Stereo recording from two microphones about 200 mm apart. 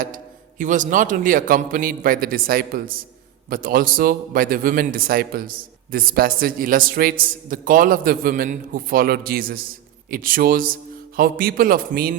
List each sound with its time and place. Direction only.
0.6 s a man's voice: 40° right (ahead or behind)